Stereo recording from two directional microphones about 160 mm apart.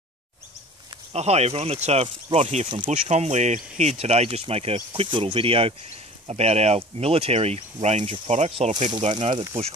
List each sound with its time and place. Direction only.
1.1 s speech: 40° right (ahead or behind)